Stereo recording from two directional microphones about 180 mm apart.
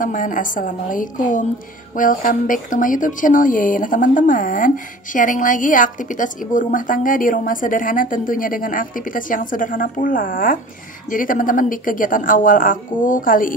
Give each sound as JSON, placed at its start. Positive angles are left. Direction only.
{"t": 0.0, "sound": "speech", "side_deg": 45}